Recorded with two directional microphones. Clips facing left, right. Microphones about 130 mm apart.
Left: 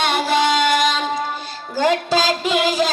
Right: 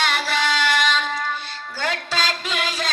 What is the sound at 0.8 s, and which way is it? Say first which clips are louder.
Child singing: left 3 dB; 40° left (ahead or behind).